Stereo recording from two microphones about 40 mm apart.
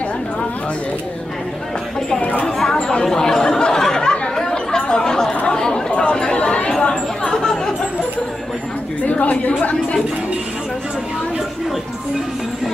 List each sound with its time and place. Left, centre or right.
2.9 s chatter: centre
5.3 s chatter: left
9.0 s a woman's voice: left